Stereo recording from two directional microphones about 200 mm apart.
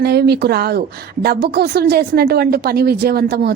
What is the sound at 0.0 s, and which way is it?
A woman's voice, 55° right (ahead or behind).